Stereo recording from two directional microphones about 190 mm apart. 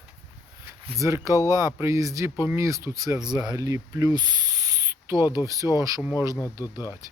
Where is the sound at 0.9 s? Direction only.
15° right (ahead or behind).